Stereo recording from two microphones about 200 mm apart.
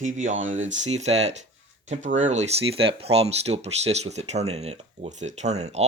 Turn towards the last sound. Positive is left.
turn(degrees=-35)  # may be behind; listen again after turning